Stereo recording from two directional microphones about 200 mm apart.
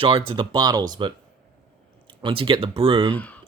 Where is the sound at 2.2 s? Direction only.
25° right (ahead or behind).